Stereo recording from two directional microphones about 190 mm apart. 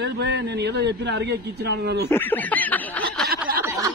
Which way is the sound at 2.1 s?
10° left (ahead or behind).